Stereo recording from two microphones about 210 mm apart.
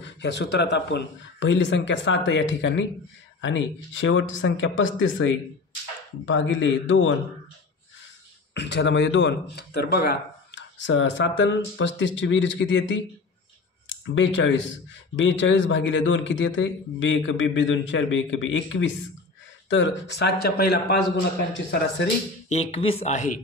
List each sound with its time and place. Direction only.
0.0 s a man's voice: 55° left (ahead or behind)
8.5 s a man's voice: 55° left (ahead or behind)
14.0 s a man's voice: 60° left (ahead or behind)
22.5 s speech: 30° left (ahead or behind)